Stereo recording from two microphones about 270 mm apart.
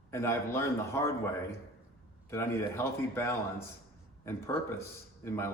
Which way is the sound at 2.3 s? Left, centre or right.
Centre.